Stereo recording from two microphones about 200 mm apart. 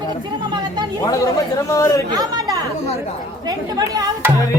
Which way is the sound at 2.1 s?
20° right (ahead or behind).